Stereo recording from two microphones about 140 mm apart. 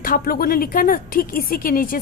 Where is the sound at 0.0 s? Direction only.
90° left.